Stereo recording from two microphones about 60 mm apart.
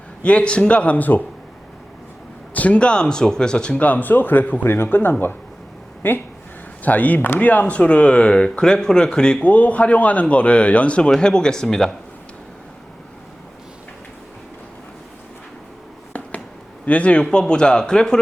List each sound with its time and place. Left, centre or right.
0.2 s speech: centre
2.5 s speech: left
6.8 s speech: left
9.5 s speech: left; by 11.9 s centre
16.1 s a sound: left
16.8 s speech: left